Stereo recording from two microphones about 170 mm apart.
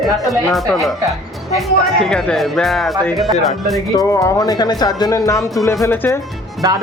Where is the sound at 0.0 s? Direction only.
Centre (ahead or behind).